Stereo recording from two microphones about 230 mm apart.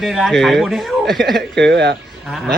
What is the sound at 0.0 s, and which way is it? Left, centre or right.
A man's voice, centre.